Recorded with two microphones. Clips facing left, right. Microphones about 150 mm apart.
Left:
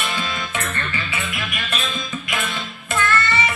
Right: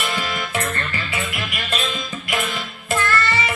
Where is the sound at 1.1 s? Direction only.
35° right (ahead or behind).